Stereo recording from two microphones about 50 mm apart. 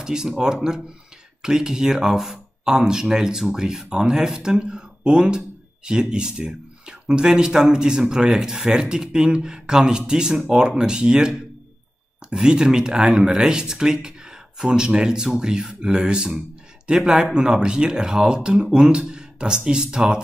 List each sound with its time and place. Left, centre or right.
0.0 s speech: centre